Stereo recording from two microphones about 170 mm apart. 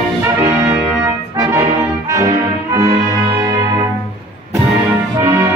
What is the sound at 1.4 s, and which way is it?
Brass instrument, 15° right (ahead or behind).